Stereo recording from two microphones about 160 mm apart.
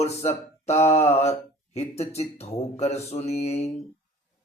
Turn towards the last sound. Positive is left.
turn(degrees=40)  # may be behind; listen again after turning